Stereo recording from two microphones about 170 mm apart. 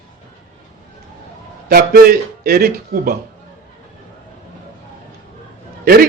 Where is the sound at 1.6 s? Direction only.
60° right (ahead or behind).